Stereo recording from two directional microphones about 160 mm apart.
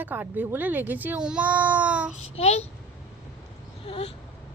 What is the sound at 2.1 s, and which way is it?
Child singing, 40° left (ahead or behind).